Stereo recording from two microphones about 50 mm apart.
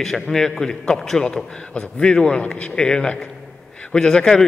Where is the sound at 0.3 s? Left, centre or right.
Centre.